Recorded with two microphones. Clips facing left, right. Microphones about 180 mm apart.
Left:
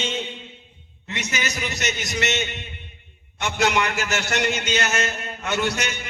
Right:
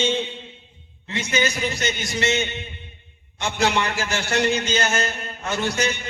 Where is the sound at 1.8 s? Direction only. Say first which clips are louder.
Right 1 dB; 30° right (ahead or behind).